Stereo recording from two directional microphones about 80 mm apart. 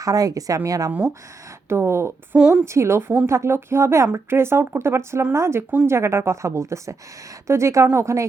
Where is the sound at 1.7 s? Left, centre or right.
Right.